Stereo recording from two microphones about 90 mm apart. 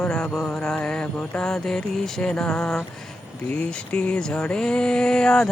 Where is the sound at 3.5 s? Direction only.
15° left (ahead or behind).